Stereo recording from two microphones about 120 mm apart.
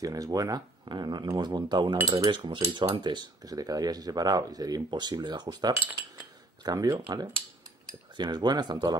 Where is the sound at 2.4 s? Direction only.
45° right (ahead or behind); by 7.0 s 30° right (ahead or behind).